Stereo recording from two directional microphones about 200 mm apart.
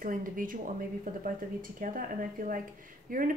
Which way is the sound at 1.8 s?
45° right (ahead or behind).